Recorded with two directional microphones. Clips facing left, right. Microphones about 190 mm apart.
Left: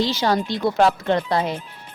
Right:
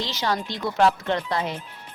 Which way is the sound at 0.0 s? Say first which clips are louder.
Left 6 dB; 35° left (ahead or behind).